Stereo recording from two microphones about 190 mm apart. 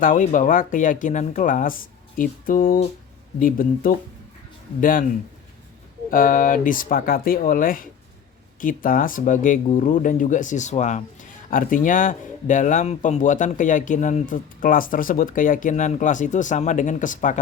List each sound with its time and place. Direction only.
0.0 s speech: 45° left (ahead or behind)
6.1 s speech: 45° left (ahead or behind)